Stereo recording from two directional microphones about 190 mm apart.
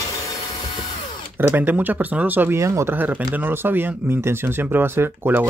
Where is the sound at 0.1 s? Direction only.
20° left (ahead or behind).